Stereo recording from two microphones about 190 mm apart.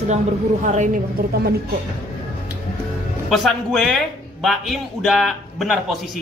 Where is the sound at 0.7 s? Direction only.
45° right (ahead or behind).